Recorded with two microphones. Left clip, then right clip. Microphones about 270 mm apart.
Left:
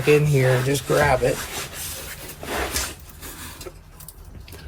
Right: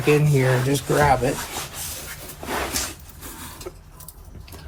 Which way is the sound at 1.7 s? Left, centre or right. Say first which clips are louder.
Even; centre.